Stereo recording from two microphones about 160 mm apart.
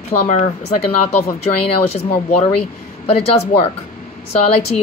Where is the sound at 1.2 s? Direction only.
40° left (ahead or behind).